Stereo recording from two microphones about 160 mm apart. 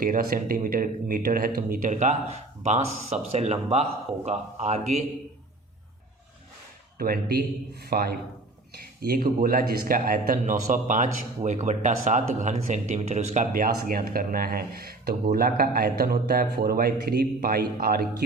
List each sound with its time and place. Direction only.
0.0 s speech: 65° right (ahead or behind)
1.9 s speech: 50° right (ahead or behind)
7.0 s a man's voice: 70° right (ahead or behind)